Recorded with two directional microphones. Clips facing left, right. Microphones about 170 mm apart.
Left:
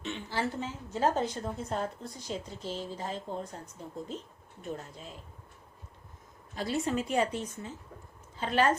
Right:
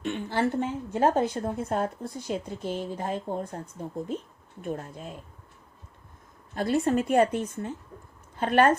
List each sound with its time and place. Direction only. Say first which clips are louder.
0.0 s a woman's voice: right 7 dB; 55° right (ahead or behind)
4.6 s speech: right 6 dB; 50° right (ahead or behind)
6.5 s a woman's voice: right 7 dB; 55° right (ahead or behind)